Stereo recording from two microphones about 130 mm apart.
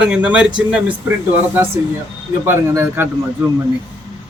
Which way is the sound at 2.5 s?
15° right (ahead or behind).